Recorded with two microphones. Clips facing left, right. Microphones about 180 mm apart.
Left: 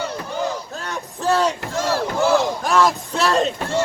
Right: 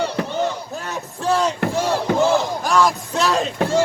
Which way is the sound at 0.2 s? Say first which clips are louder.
Right 7 dB; 75° right (ahead or behind).